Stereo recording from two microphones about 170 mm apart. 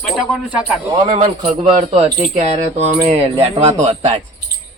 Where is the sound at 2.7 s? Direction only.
35° right (ahead or behind).